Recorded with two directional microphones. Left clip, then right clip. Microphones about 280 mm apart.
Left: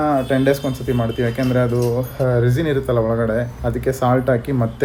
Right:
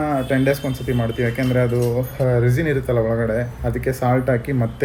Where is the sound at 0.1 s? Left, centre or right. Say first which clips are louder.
Left 2 dB; centre.